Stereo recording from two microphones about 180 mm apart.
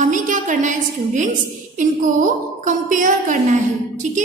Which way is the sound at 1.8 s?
45° right (ahead or behind).